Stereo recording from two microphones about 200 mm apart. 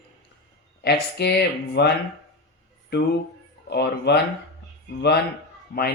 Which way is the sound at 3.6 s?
55° left (ahead or behind).